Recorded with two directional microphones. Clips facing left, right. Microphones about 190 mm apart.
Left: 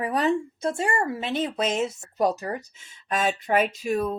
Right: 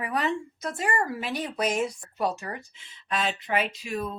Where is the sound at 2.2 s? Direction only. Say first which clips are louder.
Left 5 dB; 40° left (ahead or behind).